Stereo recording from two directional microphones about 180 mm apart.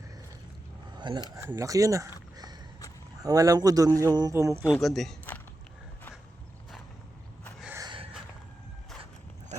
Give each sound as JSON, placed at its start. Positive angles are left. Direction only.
{"t": 0.9, "sound": "a sound", "side_deg": -25}
{"t": 1.4, "sound": "speech", "side_deg": -15}
{"t": 2.3, "sound": "a sound", "side_deg": -20}
{"t": 3.2, "sound": "a man's voice", "side_deg": -20}
{"t": 4.7, "sound": "speech", "side_deg": 0}
{"t": 7.8, "sound": "gasp", "side_deg": -25}